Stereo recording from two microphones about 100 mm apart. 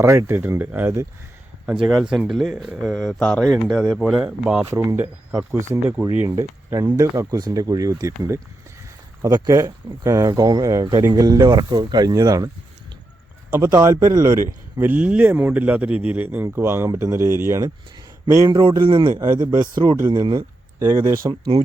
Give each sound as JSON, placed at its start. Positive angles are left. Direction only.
{"t": 0.0, "sound": "speech", "side_deg": -30}
{"t": 4.7, "sound": "speech", "side_deg": -25}
{"t": 13.6, "sound": "speech", "side_deg": -35}
{"t": 14.8, "sound": "speech", "side_deg": -15}
{"t": 18.3, "sound": "speech", "side_deg": -45}
{"t": 20.7, "sound": "speech", "side_deg": -25}